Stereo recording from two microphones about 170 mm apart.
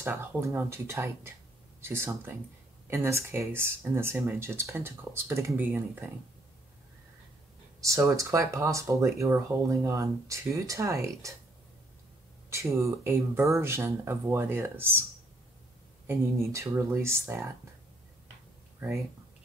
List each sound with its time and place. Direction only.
0.0 s speech: 15° right (ahead or behind)
7.8 s speech: 20° right (ahead or behind)
12.4 s speech: 15° right (ahead or behind)
16.1 s speech: 15° right (ahead or behind)